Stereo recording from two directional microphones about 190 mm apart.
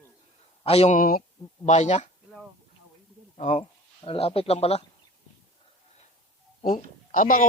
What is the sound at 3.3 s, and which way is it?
Speech, 35° left (ahead or behind).